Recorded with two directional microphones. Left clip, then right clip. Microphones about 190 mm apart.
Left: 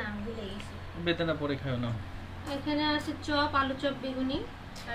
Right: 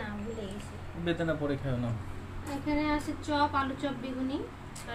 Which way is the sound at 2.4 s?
40° right (ahead or behind).